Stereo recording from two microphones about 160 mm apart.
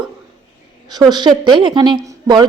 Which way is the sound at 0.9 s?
25° right (ahead or behind).